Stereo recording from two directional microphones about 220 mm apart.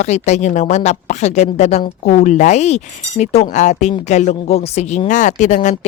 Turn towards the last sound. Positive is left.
turn(degrees=35)  # may be behind; listen again after turning